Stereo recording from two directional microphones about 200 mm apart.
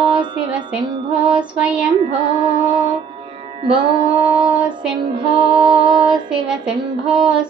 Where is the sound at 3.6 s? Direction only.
25° right (ahead or behind).